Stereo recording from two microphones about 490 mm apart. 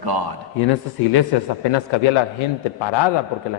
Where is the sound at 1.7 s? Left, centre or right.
Left.